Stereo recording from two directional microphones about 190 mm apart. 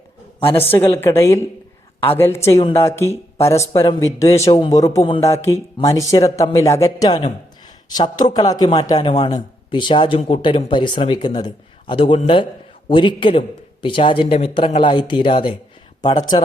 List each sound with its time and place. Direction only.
0.5 s speech: 10° left (ahead or behind)
2.6 s speech: 30° left (ahead or behind)
2.8 s speech: 15° left (ahead or behind)